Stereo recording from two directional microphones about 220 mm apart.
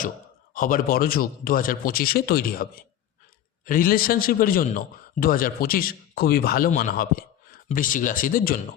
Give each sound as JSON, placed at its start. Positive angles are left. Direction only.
{"t": 0.5, "sound": "a man's voice", "side_deg": 40}